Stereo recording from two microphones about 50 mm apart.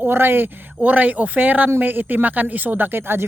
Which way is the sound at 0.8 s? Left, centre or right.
Right.